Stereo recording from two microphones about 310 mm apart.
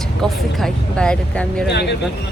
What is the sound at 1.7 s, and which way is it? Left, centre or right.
Speech, left.